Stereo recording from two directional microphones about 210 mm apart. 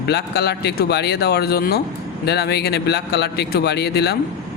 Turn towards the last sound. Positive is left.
turn(degrees=50)  # may be behind; listen again after turning